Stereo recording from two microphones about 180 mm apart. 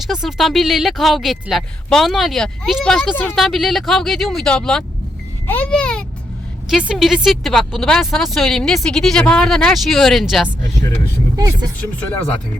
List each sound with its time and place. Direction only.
0.1 s speech: centre (ahead or behind)
11.3 s speech: 20° right (ahead or behind)